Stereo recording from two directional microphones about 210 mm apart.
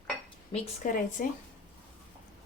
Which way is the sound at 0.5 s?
40° left (ahead or behind).